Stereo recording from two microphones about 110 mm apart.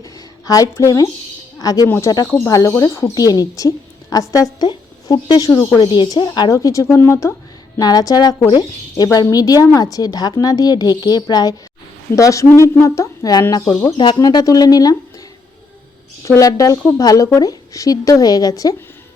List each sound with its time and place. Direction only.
0.0 s a sound: 35° left (ahead or behind)
1.5 s a woman's voice: 35° left (ahead or behind)
5.8 s a woman's voice: 45° left (ahead or behind); by 7.3 s 25° left (ahead or behind)
7.8 s a woman's voice: 35° left (ahead or behind)
13.9 s a woman's voice: 45° left (ahead or behind)
16.2 s a woman's voice: 30° left (ahead or behind)